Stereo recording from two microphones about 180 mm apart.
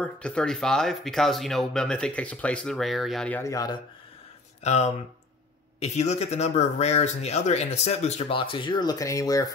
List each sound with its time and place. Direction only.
0.0 s speech: 5° left (ahead or behind)
4.6 s speech: 40° left (ahead or behind); by 9.5 s 20° left (ahead or behind)